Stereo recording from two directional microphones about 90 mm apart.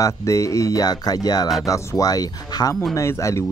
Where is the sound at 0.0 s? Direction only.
35° left (ahead or behind).